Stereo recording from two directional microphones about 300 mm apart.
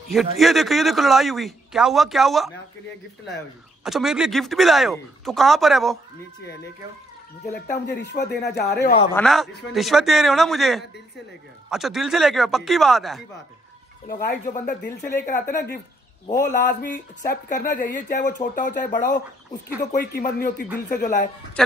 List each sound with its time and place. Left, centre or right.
0.1 s speech: centre
3.8 s speech: centre
7.5 s speech: left
9.1 s speech: centre
14.0 s speech: left
16.3 s speech: left
21.6 s a man's voice: centre